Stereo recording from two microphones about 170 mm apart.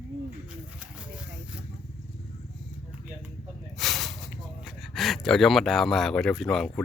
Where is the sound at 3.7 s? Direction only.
Centre (ahead or behind).